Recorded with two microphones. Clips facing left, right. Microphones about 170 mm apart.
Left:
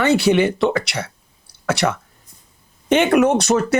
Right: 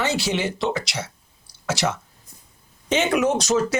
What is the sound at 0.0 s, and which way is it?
Speech, 60° left (ahead or behind).